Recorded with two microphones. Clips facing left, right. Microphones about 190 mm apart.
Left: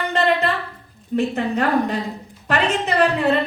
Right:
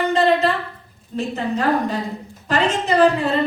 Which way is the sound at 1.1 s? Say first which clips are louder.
Left 3 dB; 60° left (ahead or behind).